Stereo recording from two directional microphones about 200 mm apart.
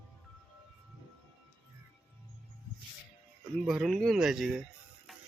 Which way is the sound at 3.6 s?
Centre (ahead or behind).